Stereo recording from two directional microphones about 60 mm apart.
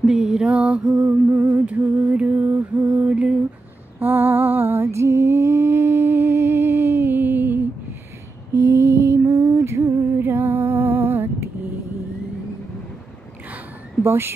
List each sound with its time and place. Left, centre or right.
0.0 s music: centre
1.3 s a sound: right
4.0 s a sound: right
8.5 s mantra: right
9.3 s music: right
10.1 s music: right
14.0 s speech: right